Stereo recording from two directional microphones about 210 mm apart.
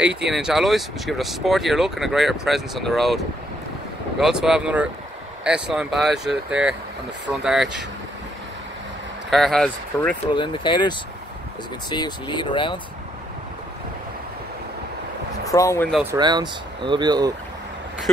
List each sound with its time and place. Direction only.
0.0 s speech: 5° right (ahead or behind)
4.2 s speech: 5° right (ahead or behind)
9.3 s speech: centre (ahead or behind)
10.2 s speech: 25° left (ahead or behind)
15.5 s speech: 15° left (ahead or behind)
15.9 s speech: 10° right (ahead or behind)
16.2 s speech: 20° right (ahead or behind)